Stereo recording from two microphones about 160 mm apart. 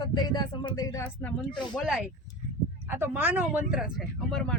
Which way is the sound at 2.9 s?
10° right (ahead or behind).